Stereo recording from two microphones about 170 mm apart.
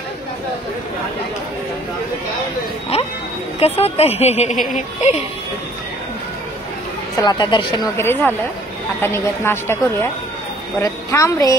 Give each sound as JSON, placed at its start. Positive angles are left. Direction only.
{"t": 3.5, "sound": "speech", "side_deg": 35}
{"t": 7.2, "sound": "speech", "side_deg": 25}
{"t": 8.0, "sound": "a woman's voice", "side_deg": 10}